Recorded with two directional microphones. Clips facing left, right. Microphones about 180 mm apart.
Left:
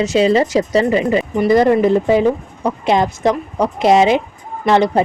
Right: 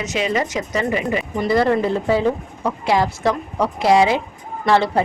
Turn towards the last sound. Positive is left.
turn(degrees=20)  # may be behind; listen again after turning